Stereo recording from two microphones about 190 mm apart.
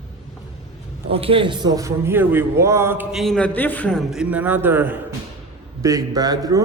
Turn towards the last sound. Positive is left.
turn(degrees=-20)  # may be behind; listen again after turning